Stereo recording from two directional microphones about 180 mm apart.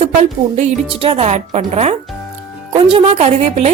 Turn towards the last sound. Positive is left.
turn(degrees=-40)  # may be behind; listen again after turning